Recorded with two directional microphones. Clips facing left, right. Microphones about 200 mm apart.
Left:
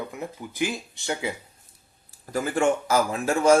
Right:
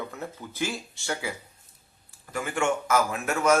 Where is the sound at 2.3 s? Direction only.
35° left (ahead or behind).